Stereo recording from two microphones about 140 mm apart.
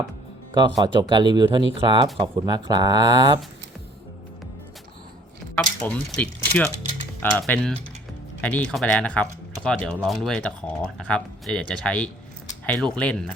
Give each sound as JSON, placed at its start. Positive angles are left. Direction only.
{"t": 0.5, "sound": "speech", "side_deg": -30}
{"t": 5.5, "sound": "speech", "side_deg": 10}